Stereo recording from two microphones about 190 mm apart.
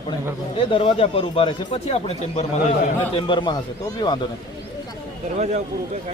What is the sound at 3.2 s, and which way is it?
Speech, 25° left (ahead or behind).